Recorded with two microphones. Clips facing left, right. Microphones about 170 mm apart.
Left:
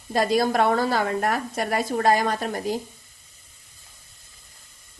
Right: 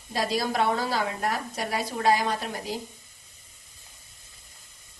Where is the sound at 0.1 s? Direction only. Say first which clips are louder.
Left 6 dB; 50° left (ahead or behind).